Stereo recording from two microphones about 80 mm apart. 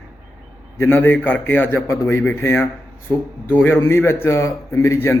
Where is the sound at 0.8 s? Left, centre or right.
Left.